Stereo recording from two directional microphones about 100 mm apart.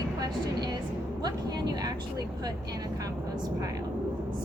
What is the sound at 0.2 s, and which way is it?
Vehicle, 40° right (ahead or behind).